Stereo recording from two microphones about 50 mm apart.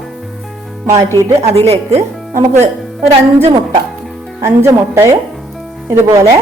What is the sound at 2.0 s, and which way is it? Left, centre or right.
Speech, right.